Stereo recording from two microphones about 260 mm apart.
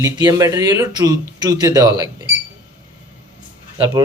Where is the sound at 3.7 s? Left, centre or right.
Centre.